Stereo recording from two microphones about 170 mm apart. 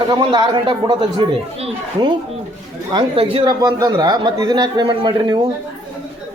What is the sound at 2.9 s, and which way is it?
A man's voice, 35° right (ahead or behind).